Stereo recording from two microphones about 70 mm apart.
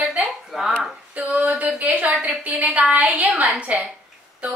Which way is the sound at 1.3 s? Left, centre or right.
Right.